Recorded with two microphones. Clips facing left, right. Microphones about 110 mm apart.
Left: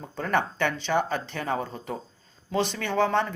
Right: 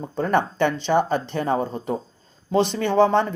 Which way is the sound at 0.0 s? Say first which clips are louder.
Right 5 dB; 30° right (ahead or behind).